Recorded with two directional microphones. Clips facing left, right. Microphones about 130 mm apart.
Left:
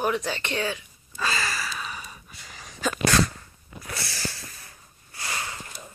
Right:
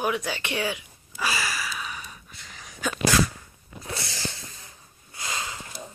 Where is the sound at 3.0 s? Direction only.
10° right (ahead or behind).